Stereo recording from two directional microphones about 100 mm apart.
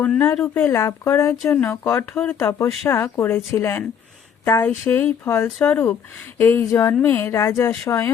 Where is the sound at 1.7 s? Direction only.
25° left (ahead or behind).